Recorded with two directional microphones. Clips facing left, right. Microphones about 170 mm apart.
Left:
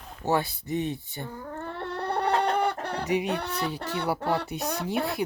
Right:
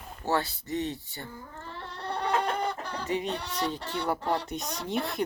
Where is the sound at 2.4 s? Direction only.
70° left (ahead or behind).